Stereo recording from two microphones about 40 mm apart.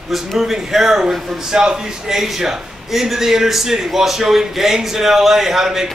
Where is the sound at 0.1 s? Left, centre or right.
Centre.